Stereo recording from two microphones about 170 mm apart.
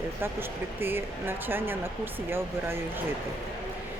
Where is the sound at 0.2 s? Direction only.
15° right (ahead or behind).